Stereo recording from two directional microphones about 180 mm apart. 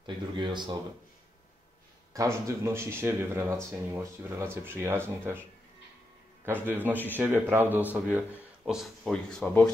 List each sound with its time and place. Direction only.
0.0 s speech: 25° right (ahead or behind)
2.1 s speech: 15° right (ahead or behind)
6.4 s speech: 10° right (ahead or behind); by 9.7 s 5° left (ahead or behind)